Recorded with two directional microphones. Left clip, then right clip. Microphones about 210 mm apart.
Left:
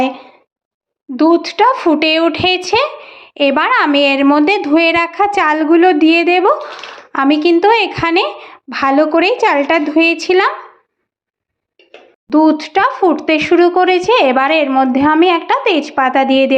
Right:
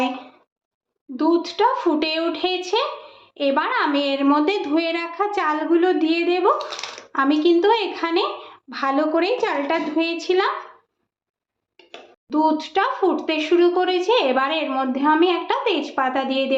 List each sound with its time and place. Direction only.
1.1 s speech: 35° left (ahead or behind)
12.3 s speech: 40° left (ahead or behind)